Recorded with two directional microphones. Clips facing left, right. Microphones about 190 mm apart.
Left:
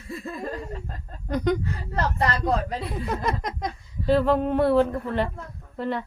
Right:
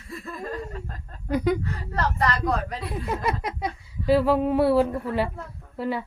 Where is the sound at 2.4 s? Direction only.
25° left (ahead or behind).